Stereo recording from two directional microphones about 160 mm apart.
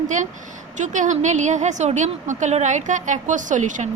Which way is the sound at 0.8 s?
50° right (ahead or behind).